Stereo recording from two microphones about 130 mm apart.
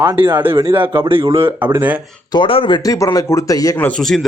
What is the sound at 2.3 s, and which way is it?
Speech, 40° left (ahead or behind).